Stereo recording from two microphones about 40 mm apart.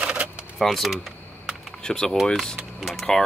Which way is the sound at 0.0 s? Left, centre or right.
Right.